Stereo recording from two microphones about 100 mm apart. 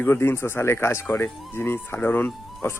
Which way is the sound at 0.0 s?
20° left (ahead or behind).